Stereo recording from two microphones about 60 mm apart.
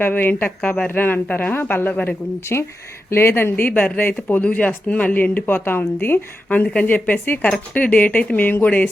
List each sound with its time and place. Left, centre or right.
0.0 s speech: left
3.6 s speech: left